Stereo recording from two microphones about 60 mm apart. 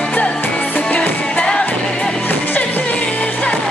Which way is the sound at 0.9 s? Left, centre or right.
Centre.